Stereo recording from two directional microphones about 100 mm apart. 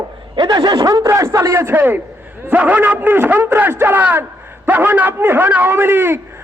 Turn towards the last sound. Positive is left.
turn(degrees=-20)  # may be behind; listen again after turning